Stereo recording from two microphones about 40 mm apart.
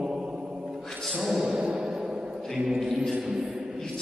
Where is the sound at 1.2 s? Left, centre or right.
Centre.